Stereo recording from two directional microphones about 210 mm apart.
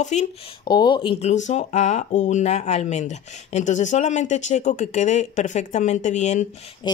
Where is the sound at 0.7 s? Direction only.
20° left (ahead or behind).